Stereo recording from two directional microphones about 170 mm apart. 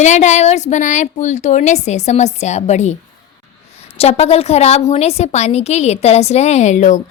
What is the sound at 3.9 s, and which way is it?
A woman's voice, 35° left (ahead or behind).